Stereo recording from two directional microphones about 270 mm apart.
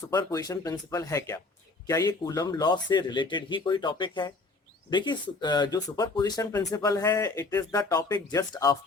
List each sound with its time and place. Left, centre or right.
0.1 s speech: centre